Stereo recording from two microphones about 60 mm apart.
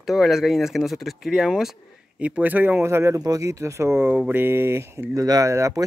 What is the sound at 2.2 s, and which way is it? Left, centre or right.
Speech, right.